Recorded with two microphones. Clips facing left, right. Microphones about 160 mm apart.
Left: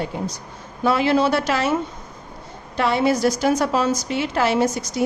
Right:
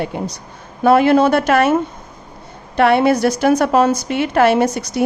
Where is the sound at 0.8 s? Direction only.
55° right (ahead or behind).